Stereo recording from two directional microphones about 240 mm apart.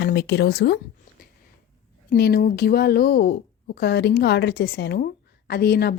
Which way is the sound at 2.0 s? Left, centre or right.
Left.